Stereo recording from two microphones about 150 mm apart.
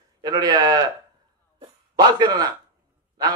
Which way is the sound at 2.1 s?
25° right (ahead or behind).